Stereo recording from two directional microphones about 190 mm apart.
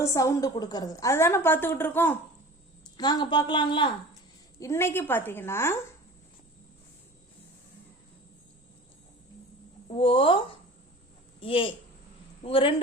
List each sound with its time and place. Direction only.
0.0 s a woman's voice: 15° left (ahead or behind)
3.0 s a woman's voice: 20° left (ahead or behind)
4.6 s a woman's voice: 15° left (ahead or behind)
9.9 s a woman's voice: 30° left (ahead or behind)